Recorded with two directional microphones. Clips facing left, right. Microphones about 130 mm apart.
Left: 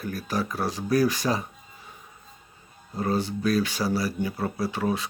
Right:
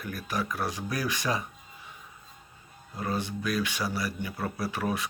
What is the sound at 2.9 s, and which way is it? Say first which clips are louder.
Speech: left 5 dB; 30° left (ahead or behind).